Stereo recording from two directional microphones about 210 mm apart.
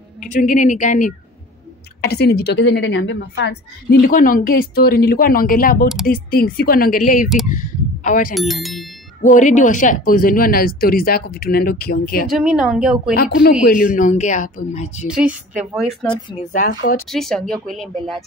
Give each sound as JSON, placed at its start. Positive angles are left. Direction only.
{"t": 0.2, "sound": "speech", "side_deg": 35}
{"t": 2.0, "sound": "a woman's voice", "side_deg": 50}
{"t": 8.4, "sound": "speech", "side_deg": 0}
{"t": 9.2, "sound": "a woman's voice", "side_deg": 35}
{"t": 12.3, "sound": "speech", "side_deg": -5}
{"t": 13.1, "sound": "a woman's voice", "side_deg": 45}
{"t": 15.0, "sound": "speech", "side_deg": -5}
{"t": 16.5, "sound": "a woman's voice", "side_deg": 45}
{"t": 17.1, "sound": "speech", "side_deg": 0}